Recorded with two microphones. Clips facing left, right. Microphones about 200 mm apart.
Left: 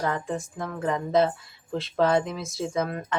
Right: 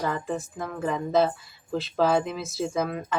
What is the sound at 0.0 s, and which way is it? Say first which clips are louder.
Speech: even; 5° right (ahead or behind).